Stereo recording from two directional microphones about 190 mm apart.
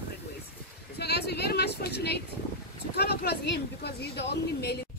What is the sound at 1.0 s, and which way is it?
A woman's voice, 60° left (ahead or behind).